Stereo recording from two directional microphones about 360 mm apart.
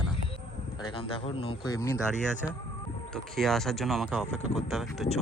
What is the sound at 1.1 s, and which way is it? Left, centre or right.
Speech, centre.